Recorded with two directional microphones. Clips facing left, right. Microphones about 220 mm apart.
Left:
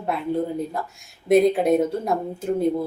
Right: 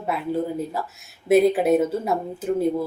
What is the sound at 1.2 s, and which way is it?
Speech, 5° right (ahead or behind).